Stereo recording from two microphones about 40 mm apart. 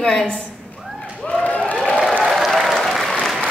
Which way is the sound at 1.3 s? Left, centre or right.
Left.